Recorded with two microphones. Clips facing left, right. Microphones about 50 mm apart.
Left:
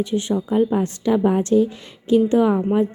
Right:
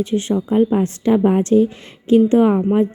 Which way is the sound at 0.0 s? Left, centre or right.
Right.